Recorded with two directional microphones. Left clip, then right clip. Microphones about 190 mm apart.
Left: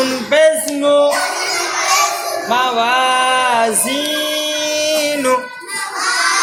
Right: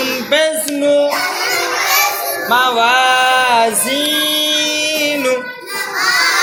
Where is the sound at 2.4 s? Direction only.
25° left (ahead or behind).